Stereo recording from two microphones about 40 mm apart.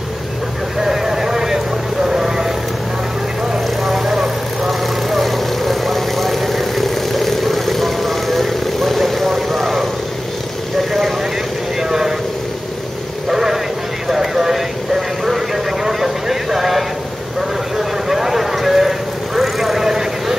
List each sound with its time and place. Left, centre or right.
0.7 s vehicle: centre
3.5 s vehicle: centre
10.9 s vehicle: centre
13.3 s a sound: centre
14.0 s vehicle: centre
17.4 s a sound: centre